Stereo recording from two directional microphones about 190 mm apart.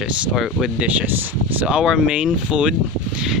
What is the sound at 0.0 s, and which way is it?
Speech, centre (ahead or behind).